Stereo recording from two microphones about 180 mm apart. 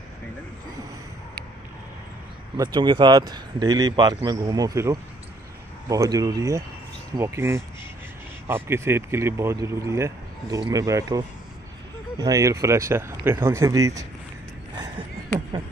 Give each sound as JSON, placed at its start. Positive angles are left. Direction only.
{"t": 2.5, "sound": "speech", "side_deg": -25}